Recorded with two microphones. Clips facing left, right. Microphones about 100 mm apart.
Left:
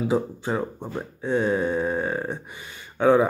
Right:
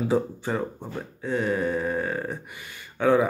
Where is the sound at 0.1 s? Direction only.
15° left (ahead or behind).